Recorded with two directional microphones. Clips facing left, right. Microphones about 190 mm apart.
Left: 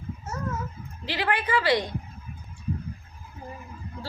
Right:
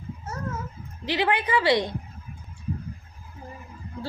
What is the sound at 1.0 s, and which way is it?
Speech, 20° right (ahead or behind).